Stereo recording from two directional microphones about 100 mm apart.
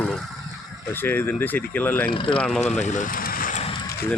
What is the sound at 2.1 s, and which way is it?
Speech, 60° left (ahead or behind).